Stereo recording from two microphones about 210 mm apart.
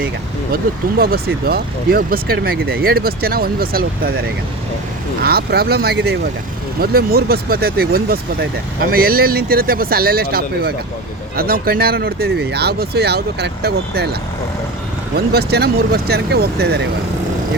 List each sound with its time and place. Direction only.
0.5 s speech: 45° right (ahead or behind)
5.2 s speech: 50° right (ahead or behind)